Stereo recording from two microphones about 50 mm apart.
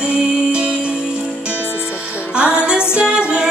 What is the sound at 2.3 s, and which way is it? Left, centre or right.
Music, right.